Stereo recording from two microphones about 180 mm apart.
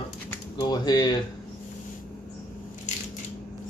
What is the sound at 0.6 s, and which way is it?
Speech, 25° left (ahead or behind).